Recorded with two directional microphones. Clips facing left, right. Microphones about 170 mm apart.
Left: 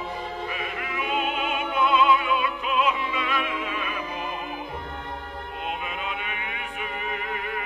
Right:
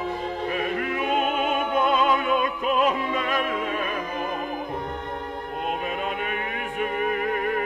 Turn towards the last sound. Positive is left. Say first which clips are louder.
# right 7 dB
turn(degrees=-45)  # may be behind; listen again after turning